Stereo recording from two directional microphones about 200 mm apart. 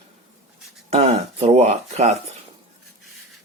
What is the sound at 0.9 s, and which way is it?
Speech, 30° right (ahead or behind).